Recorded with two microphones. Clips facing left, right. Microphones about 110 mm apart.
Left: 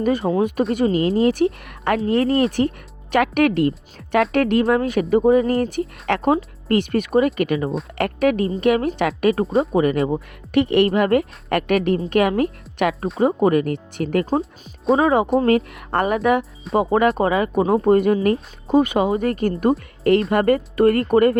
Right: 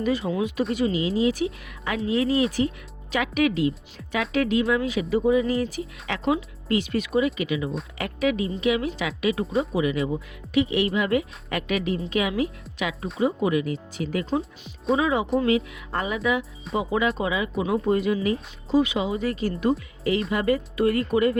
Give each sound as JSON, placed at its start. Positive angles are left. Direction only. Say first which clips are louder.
{"t": 0.0, "sound": "speech", "louder": "left 6 dB", "side_deg": 50}